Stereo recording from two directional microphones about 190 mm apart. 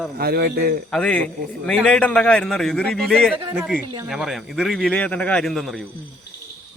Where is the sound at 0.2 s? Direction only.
55° right (ahead or behind).